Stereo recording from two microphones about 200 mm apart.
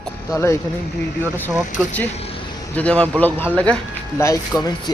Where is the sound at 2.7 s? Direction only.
5° left (ahead or behind).